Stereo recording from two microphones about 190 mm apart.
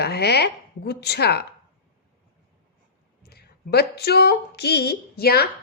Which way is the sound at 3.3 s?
55° left (ahead or behind).